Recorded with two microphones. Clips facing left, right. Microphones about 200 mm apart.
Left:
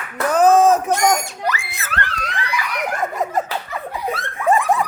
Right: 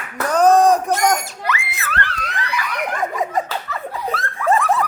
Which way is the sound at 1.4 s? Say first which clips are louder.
Even; 35° left (ahead or behind).